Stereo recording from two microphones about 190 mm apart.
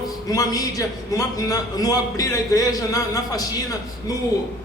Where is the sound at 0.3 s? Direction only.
20° left (ahead or behind).